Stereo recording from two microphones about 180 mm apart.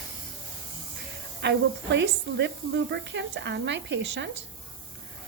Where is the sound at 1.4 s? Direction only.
75° right (ahead or behind).